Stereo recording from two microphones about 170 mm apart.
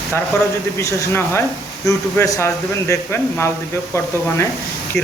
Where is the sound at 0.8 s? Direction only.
15° left (ahead or behind).